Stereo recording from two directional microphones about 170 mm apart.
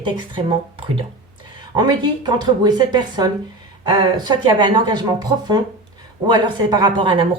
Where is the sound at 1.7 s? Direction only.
25° right (ahead or behind).